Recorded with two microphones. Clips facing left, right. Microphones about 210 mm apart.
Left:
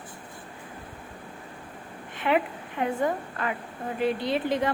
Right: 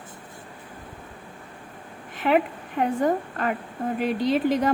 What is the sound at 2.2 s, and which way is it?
A woman's voice, 40° right (ahead or behind).